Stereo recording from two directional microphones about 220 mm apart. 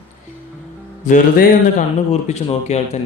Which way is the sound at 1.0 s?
35° left (ahead or behind).